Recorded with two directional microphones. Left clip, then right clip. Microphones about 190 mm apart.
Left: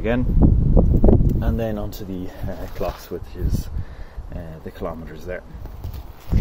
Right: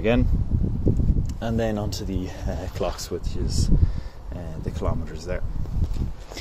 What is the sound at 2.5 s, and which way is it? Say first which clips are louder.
Speech: left 1 dB; 20° right (ahead or behind).